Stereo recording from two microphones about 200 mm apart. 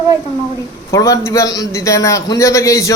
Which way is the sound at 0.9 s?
15° left (ahead or behind).